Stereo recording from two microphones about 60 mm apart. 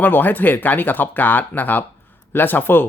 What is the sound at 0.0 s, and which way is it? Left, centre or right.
Speech, left.